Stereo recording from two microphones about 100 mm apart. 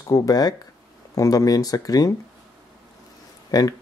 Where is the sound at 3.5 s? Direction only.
40° left (ahead or behind).